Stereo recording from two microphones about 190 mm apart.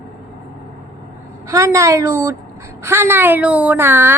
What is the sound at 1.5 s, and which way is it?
Speech, 15° right (ahead or behind).